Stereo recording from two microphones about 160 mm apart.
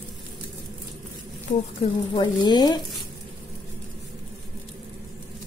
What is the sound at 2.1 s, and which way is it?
Speech, 25° left (ahead or behind).